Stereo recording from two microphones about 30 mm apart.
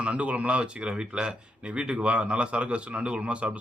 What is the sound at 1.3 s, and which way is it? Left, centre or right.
A man's voice, right.